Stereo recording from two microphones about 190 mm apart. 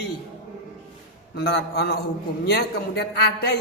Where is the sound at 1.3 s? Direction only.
55° left (ahead or behind).